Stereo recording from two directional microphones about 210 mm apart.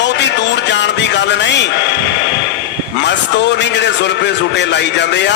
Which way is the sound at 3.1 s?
55° left (ahead or behind).